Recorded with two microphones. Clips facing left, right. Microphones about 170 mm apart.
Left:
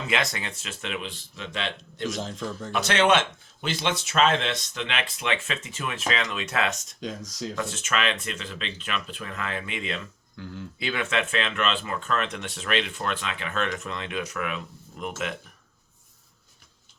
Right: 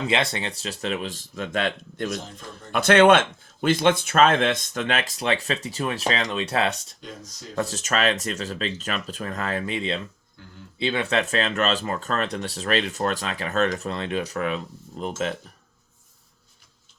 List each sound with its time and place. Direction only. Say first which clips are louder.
0.1 s speech: right 3 dB; 30° right (ahead or behind); by 2.0 s 50° right (ahead or behind)
2.0 s a man's voice: left 4 dB; 90° left
2.7 s speech: right 6 dB; 55° right (ahead or behind); by 6.7 s 30° right (ahead or behind)
7.0 s a man's voice: left 7 dB; 90° left
7.5 s speech: right 5 dB; 35° right (ahead or behind)
10.4 s a man's voice: left 9 dB; 90° left
10.8 s speech: right 4 dB; 30° right (ahead or behind)